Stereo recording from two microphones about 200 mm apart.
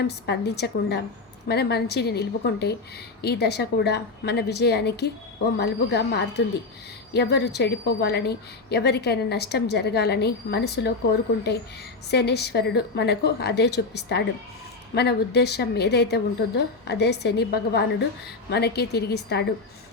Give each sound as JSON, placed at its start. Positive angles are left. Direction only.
{"t": 0.0, "sound": "a woman's voice", "side_deg": 55}
{"t": 12.1, "sound": "a woman's voice", "side_deg": 55}